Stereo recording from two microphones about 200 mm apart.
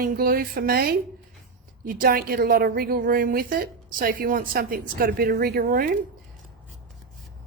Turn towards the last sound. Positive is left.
turn(degrees=-45)  # may be behind; listen again after turning